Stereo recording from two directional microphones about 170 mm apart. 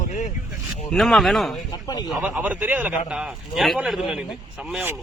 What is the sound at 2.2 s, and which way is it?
A man's voice, 10° right (ahead or behind).